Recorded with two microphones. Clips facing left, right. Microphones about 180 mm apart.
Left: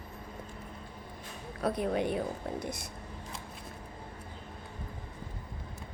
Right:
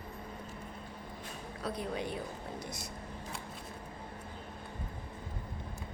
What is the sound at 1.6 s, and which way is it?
Speech, 60° left (ahead or behind).